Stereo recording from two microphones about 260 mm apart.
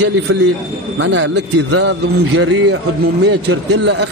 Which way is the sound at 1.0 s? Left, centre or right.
Right.